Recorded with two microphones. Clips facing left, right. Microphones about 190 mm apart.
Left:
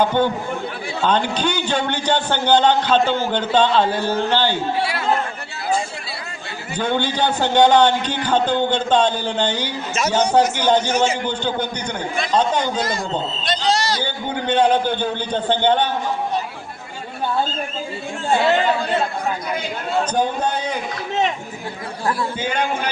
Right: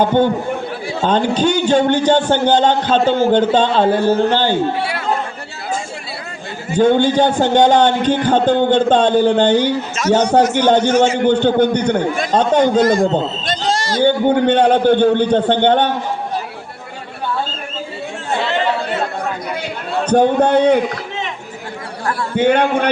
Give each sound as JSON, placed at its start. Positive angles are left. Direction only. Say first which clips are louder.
{"t": 0.0, "sound": "a man's voice", "louder": "right 4 dB", "side_deg": -50}
{"t": 6.7, "sound": "a man's voice", "louder": "right 9 dB", "side_deg": -45}
{"t": 20.1, "sound": "a man's voice", "louder": "right 8 dB", "side_deg": -65}
{"t": 22.4, "sound": "a man's voice", "louder": "right 9 dB", "side_deg": -65}